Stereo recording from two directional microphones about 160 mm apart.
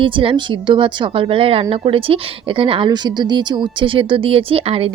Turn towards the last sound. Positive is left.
turn(degrees=-35)  # may be behind; listen again after turning